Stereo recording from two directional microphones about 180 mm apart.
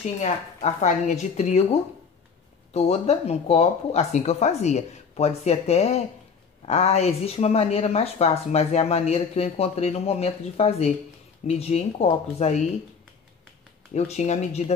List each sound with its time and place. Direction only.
0.2 s a woman's voice: 40° left (ahead or behind)
13.9 s a woman's voice: 40° left (ahead or behind)